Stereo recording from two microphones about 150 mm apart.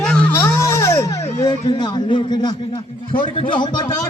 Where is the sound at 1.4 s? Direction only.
30° left (ahead or behind).